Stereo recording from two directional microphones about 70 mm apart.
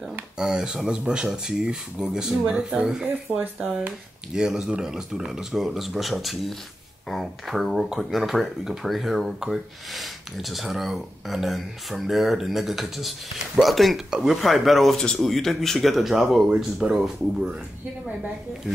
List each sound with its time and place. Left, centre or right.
0.4 s speech: centre
4.3 s speech: centre